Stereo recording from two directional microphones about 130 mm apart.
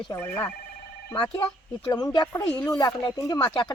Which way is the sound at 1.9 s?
30° left (ahead or behind).